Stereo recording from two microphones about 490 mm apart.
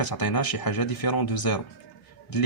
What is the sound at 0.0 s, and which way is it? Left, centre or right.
Speech, left.